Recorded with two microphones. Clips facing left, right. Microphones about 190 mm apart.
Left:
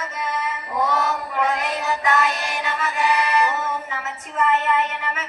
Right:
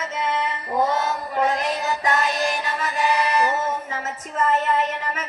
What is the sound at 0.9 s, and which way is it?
Music, 65° left (ahead or behind).